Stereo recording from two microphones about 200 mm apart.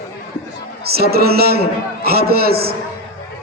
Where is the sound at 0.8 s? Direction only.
50° right (ahead or behind).